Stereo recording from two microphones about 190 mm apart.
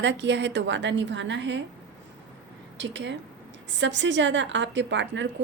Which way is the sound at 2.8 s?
70° right (ahead or behind).